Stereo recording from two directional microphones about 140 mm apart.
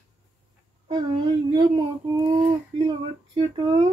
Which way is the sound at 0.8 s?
35° right (ahead or behind).